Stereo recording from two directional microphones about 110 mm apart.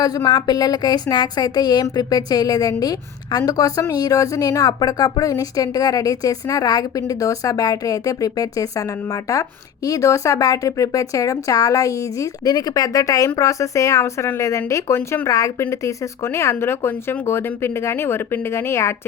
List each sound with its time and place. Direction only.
0.0 s speech: 35° left (ahead or behind)